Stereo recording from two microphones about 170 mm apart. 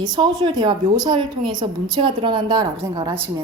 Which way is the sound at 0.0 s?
25° right (ahead or behind).